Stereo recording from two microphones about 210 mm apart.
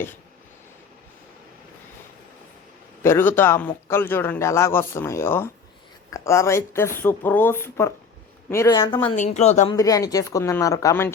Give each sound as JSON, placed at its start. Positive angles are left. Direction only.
{"t": 3.0, "sound": "a man's voice", "side_deg": 10}
{"t": 9.0, "sound": "speech", "side_deg": 35}
{"t": 9.7, "sound": "a man's voice", "side_deg": 15}